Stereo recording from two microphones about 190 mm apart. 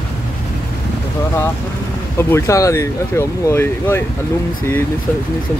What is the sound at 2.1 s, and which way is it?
Speech, 15° left (ahead or behind).